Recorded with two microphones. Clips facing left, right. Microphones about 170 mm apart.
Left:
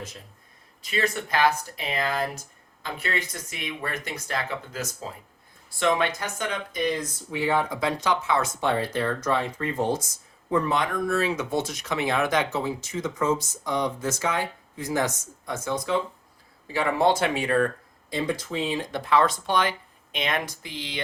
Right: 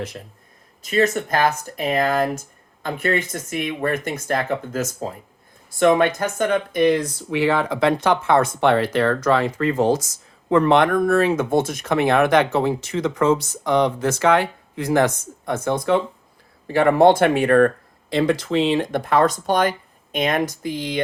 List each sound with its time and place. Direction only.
0.8 s speech: 45° right (ahead or behind)
18.1 s speech: 75° right (ahead or behind); by 21.0 s 45° right (ahead or behind)